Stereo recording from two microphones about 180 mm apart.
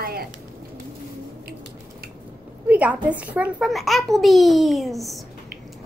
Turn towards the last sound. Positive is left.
turn(degrees=0)  # may be behind; listen again after turning